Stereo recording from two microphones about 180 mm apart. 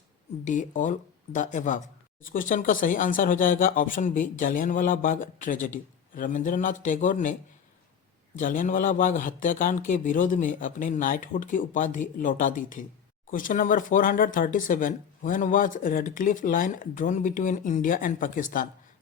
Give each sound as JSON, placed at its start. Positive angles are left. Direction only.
{"t": 0.4, "sound": "speech", "side_deg": 45}
{"t": 8.4, "sound": "speech", "side_deg": 45}